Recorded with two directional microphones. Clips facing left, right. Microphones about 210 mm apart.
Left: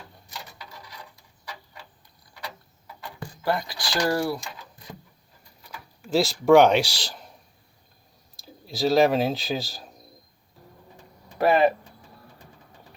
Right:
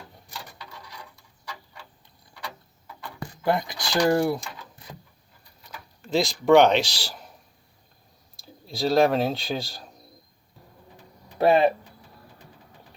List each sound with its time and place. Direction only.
3.4 s speech: 20° right (ahead or behind)
6.0 s speech: 5° left (ahead or behind)
7.0 s speech: 5° right (ahead or behind)
8.4 s speech: centre (ahead or behind)
11.3 s speech: 25° right (ahead or behind)